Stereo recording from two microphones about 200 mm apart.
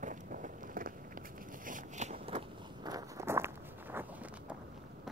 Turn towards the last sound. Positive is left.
turn(degrees=-10)  # may be behind; listen again after turning